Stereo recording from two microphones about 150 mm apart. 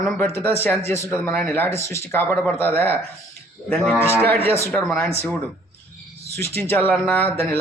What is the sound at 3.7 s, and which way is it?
Cattle, 5° left (ahead or behind).